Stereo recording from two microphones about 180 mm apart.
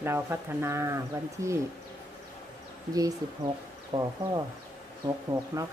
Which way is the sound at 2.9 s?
20° right (ahead or behind).